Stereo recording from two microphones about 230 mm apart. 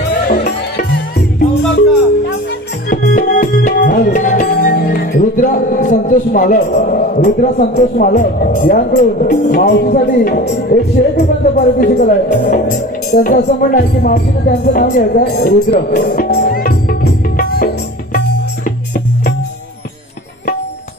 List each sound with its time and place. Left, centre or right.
2.9 s music: left
11.1 s music: left